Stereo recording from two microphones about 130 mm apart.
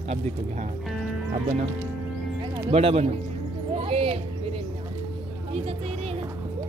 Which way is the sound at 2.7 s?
50° right (ahead or behind).